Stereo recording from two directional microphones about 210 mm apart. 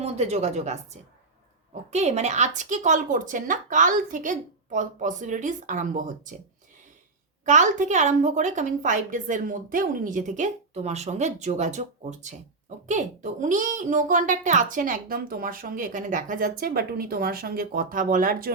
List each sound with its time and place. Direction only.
0.0 s a child's voice: 30° right (ahead or behind)
7.4 s a child's voice: 35° right (ahead or behind)